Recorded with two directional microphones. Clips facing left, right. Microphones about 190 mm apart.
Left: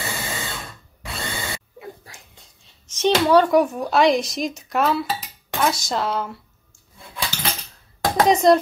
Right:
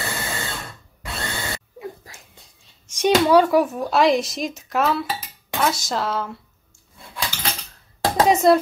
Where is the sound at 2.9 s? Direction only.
10° right (ahead or behind).